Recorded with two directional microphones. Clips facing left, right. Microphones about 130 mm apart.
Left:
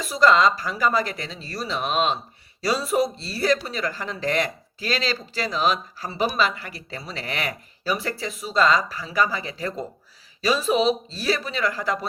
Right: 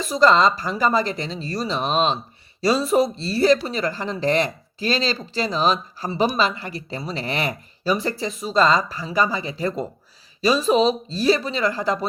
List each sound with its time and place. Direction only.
0.2 s speech: 25° right (ahead or behind)